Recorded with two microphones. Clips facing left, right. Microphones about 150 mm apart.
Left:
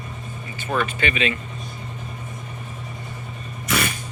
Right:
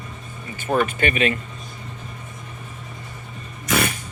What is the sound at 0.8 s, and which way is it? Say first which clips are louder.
Speech: right 2 dB; 45° right (ahead or behind).